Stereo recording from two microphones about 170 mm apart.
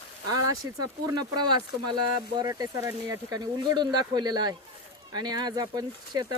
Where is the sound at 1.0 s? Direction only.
25° right (ahead or behind).